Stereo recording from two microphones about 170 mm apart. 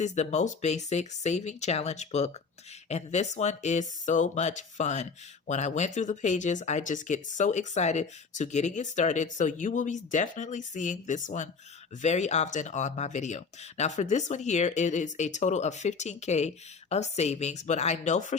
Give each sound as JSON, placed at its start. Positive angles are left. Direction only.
{"t": 0.0, "sound": "speech", "side_deg": 40}